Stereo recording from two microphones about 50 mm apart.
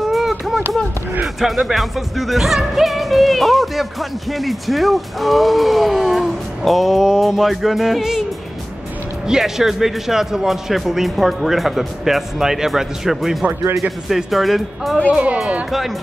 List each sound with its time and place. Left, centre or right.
0.0 s a sound: centre
1.2 s music: centre
9.3 s music: centre
15.0 s speech: right